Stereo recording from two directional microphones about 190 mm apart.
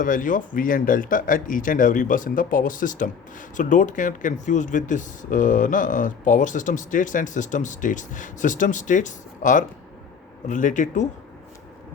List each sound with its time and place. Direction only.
0.0 s speech: 45° left (ahead or behind)